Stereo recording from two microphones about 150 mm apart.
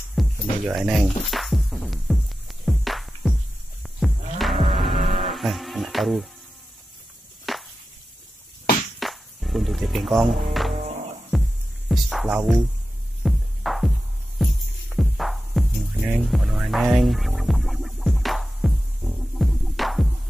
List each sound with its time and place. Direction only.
0.1 s music: centre (ahead or behind)
4.9 s music: 30° right (ahead or behind)
5.2 s music: centre (ahead or behind)
7.5 s chop: centre (ahead or behind)
9.0 s music: centre (ahead or behind)
13.2 s throbbing: centre (ahead or behind)
15.0 s music: centre (ahead or behind)